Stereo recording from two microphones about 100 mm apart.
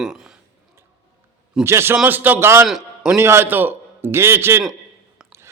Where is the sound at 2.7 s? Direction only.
5° right (ahead or behind).